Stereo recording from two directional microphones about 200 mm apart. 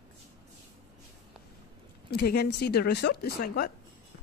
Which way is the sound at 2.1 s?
55° left (ahead or behind).